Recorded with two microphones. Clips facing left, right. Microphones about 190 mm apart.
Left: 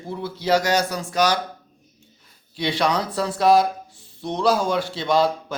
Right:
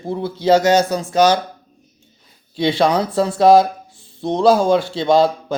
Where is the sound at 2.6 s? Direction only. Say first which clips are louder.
Right 6 dB; 25° right (ahead or behind).